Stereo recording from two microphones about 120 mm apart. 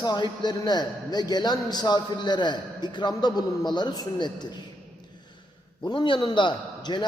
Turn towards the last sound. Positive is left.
turn(degrees=40)  # may be behind; listen again after turning